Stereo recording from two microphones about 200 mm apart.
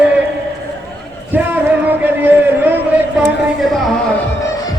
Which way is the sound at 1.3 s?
10° right (ahead or behind).